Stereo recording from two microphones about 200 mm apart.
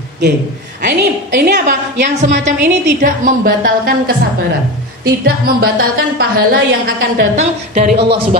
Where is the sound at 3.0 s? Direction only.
45° right (ahead or behind).